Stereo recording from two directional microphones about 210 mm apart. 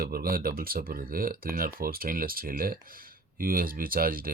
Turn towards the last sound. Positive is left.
turn(degrees=-45)  # may be behind; listen again after turning